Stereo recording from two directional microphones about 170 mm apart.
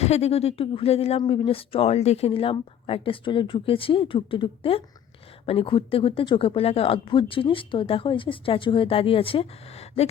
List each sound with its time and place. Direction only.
0.0 s speech: 40° left (ahead or behind)